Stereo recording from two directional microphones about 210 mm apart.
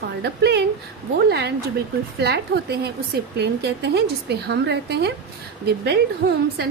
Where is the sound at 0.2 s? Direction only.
55° right (ahead or behind).